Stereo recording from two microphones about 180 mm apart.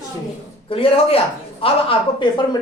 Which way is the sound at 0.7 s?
30° left (ahead or behind).